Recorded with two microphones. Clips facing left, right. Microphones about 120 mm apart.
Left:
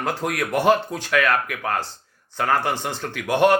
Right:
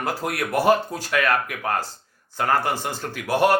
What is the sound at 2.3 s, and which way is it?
Speech, 10° right (ahead or behind).